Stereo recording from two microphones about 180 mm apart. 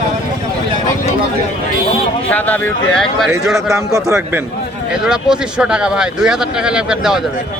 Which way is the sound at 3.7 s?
15° right (ahead or behind).